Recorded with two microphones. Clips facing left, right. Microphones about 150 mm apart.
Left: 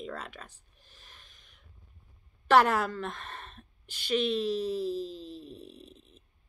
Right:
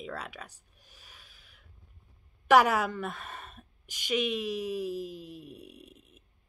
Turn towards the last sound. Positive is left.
turn(degrees=-10)  # may be behind; listen again after turning